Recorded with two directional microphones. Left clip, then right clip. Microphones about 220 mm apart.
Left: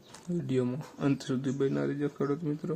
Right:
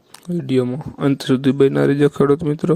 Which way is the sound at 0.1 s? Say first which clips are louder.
Right 12 dB; 40° right (ahead or behind).